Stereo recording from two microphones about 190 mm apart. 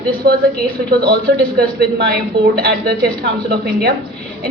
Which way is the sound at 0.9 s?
55° right (ahead or behind).